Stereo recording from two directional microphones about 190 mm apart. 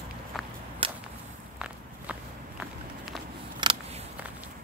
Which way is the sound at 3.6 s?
25° right (ahead or behind).